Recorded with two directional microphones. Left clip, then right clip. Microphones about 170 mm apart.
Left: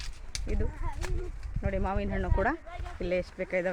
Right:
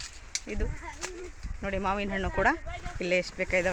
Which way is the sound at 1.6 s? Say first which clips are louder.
Right 3 dB; 15° right (ahead or behind).